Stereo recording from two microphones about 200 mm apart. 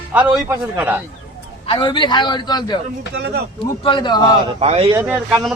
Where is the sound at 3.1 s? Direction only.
60° right (ahead or behind).